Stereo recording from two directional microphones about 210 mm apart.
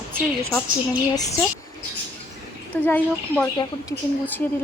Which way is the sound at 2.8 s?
10° left (ahead or behind).